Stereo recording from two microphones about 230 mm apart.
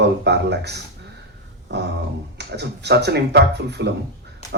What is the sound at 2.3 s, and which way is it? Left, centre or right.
Speech, right.